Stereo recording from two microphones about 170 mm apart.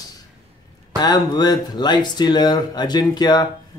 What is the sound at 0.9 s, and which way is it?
Speech, 25° left (ahead or behind).